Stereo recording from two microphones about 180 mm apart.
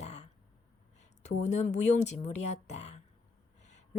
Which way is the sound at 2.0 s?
40° left (ahead or behind).